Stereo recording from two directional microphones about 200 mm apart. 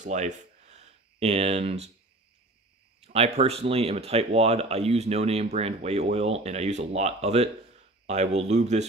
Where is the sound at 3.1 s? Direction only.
30° right (ahead or behind).